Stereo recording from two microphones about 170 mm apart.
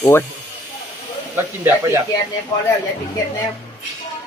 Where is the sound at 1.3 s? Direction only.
15° right (ahead or behind).